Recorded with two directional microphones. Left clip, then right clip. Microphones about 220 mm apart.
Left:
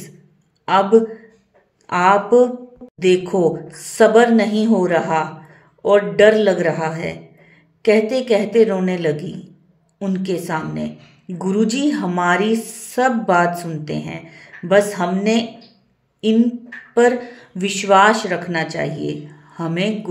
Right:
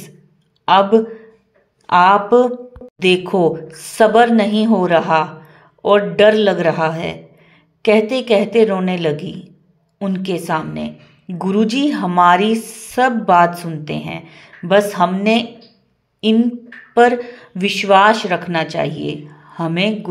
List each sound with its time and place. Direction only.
0.7 s a woman's voice: 25° right (ahead or behind)